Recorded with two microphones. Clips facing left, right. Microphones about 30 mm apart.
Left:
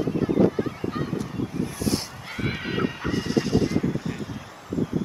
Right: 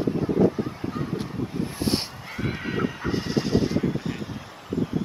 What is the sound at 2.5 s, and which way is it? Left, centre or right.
Honk, left.